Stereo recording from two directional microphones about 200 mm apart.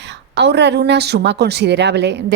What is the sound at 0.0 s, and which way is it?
A woman's voice, 60° right (ahead or behind).